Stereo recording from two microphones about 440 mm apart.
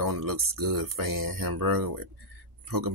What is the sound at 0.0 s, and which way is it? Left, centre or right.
Speech, right.